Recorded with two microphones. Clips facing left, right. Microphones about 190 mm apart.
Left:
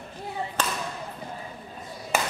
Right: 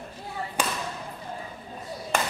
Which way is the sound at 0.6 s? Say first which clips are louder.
Right 1 dB; 10° right (ahead or behind).